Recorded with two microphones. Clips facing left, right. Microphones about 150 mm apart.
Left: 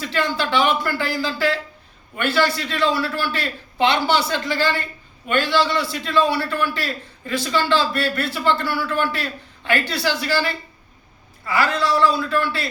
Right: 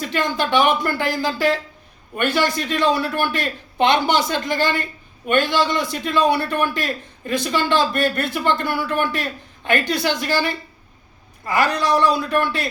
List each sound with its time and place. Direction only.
0.1 s a man's voice: 15° right (ahead or behind)
11.4 s a man's voice: 15° right (ahead or behind)